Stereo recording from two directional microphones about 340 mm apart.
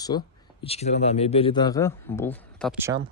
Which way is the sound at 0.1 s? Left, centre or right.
Centre.